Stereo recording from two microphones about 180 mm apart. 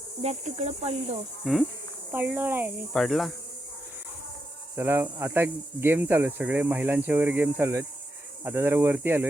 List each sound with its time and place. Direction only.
0.2 s speech: 40° right (ahead or behind)
1.5 s insect: centre (ahead or behind)
2.1 s speech: 10° right (ahead or behind)
2.9 s insect: centre (ahead or behind)
4.7 s speech: 10° right (ahead or behind)